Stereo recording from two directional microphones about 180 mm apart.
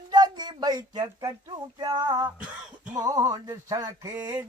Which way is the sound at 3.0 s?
20° right (ahead or behind).